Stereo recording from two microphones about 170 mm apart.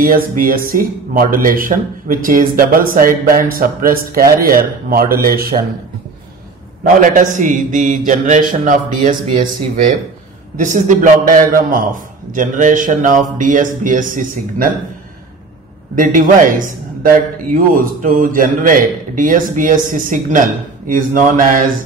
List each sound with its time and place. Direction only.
0.0 s speech: 55° right (ahead or behind)
6.8 s speech: 50° right (ahead or behind)
16.0 s speech: 50° right (ahead or behind)